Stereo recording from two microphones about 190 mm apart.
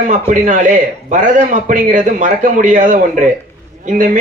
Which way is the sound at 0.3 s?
40° right (ahead or behind).